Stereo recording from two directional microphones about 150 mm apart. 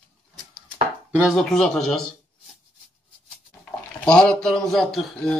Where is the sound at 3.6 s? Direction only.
5° left (ahead or behind).